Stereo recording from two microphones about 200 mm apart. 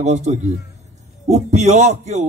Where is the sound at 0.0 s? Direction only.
35° right (ahead or behind).